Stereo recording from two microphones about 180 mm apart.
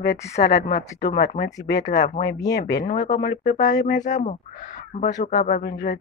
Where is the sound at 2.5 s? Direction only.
65° left (ahead or behind).